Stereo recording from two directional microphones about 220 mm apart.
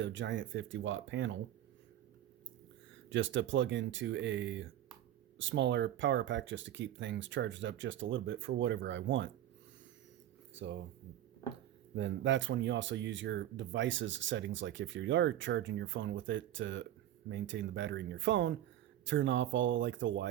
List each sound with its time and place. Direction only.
0.0 s speech: 55° right (ahead or behind)
3.1 s speech: 55° right (ahead or behind)
10.5 s speech: 55° right (ahead or behind)
11.9 s speech: 55° right (ahead or behind)